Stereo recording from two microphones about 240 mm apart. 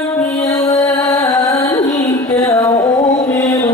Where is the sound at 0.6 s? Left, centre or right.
Centre.